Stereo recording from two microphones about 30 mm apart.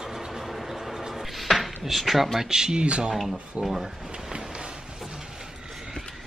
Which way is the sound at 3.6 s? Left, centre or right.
Centre.